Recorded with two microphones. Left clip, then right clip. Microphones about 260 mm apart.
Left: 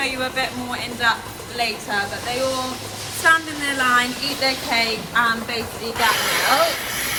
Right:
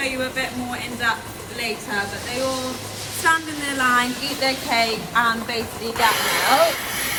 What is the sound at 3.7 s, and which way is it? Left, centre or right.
Speech, right.